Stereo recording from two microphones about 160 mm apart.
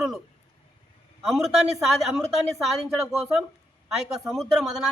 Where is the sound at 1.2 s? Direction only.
Centre (ahead or behind).